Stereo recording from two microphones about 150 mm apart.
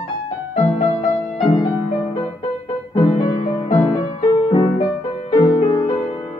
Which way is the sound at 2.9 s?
30° left (ahead or behind).